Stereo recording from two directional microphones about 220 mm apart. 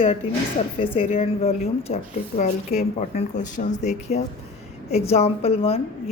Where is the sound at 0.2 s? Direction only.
25° left (ahead or behind).